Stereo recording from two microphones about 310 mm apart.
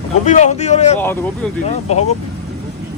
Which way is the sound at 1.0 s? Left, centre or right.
Centre.